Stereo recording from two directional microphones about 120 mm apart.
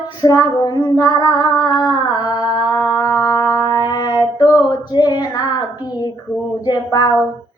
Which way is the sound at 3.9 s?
35° left (ahead or behind).